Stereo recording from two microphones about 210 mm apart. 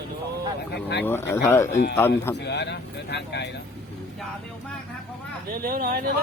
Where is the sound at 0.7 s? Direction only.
50° left (ahead or behind).